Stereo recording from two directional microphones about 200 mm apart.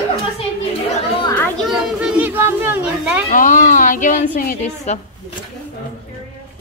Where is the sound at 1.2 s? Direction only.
10° left (ahead or behind).